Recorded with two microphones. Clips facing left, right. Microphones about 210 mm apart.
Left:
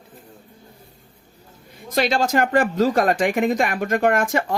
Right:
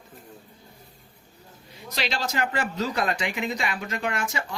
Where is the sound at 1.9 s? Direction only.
50° left (ahead or behind).